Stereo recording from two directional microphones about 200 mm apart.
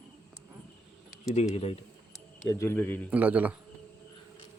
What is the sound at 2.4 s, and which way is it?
Speech, 15° left (ahead or behind).